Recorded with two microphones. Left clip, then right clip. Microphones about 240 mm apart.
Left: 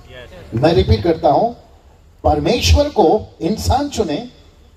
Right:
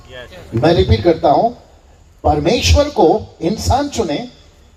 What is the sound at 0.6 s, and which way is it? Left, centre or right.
Speech, left.